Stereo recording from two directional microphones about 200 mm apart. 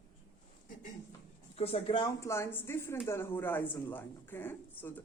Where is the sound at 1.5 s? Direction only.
30° left (ahead or behind).